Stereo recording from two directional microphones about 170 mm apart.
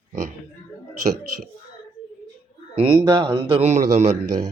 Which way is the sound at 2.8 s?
30° right (ahead or behind).